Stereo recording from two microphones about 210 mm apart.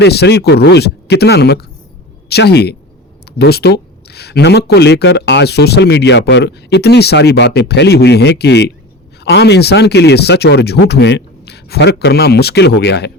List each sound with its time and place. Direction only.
0.0 s speech: 50° left (ahead or behind)